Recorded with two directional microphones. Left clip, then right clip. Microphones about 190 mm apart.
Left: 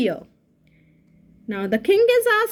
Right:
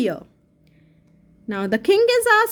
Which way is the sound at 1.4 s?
45° right (ahead or behind).